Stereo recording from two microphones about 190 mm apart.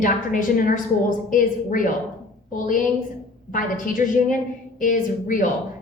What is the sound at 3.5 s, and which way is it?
A woman's voice, 45° left (ahead or behind).